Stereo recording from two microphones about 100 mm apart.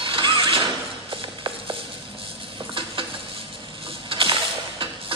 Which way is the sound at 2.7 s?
60° right (ahead or behind).